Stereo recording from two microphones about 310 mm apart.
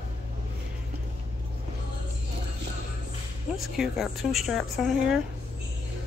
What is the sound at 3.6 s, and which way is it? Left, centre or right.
A woman's voice, centre.